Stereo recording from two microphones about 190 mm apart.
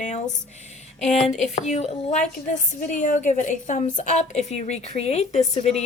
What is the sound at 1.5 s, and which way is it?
A woman's voice, 35° left (ahead or behind).